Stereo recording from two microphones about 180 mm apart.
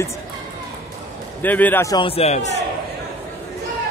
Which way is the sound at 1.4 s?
10° left (ahead or behind).